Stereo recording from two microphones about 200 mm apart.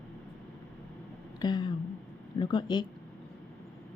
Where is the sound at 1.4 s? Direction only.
20° left (ahead or behind).